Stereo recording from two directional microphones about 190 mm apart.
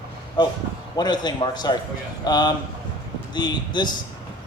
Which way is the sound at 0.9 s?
20° left (ahead or behind).